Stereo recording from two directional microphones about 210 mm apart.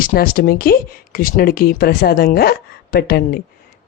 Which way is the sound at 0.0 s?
45° left (ahead or behind).